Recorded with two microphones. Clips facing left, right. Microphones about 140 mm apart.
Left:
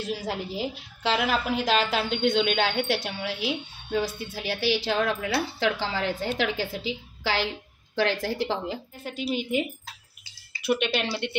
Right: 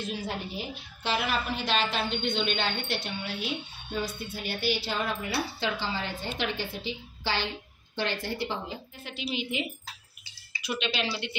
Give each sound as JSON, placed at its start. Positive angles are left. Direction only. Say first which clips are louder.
{"t": 0.0, "sound": "a woman's voice", "louder": "left 3 dB", "side_deg": 90}
{"t": 9.0, "sound": "speech", "louder": "left 5 dB", "side_deg": 45}